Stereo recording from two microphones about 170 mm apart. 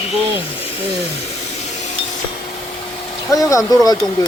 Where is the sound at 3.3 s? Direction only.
20° left (ahead or behind).